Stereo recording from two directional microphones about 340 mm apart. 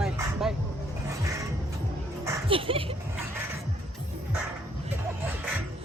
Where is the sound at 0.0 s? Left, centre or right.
Centre.